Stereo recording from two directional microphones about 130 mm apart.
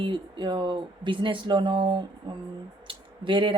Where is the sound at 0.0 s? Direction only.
40° right (ahead or behind).